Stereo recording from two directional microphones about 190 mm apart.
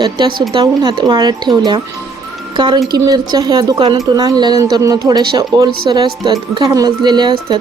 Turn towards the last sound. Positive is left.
turn(degrees=-20)  # may be behind; listen again after turning